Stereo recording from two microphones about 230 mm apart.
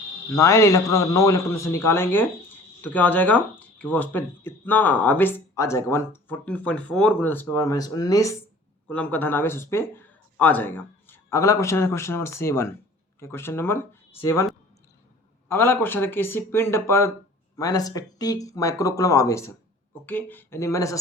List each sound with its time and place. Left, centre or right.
0.3 s speech: centre
15.4 s speech: centre